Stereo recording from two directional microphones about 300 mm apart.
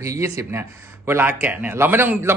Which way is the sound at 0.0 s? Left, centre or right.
Centre.